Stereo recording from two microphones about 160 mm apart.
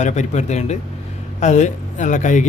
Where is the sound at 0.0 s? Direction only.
45° left (ahead or behind).